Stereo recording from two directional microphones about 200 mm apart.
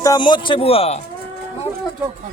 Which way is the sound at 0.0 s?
20° left (ahead or behind).